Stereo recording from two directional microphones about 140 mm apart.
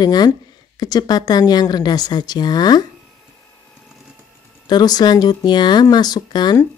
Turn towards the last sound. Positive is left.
turn(degrees=30)  # may be behind; listen again after turning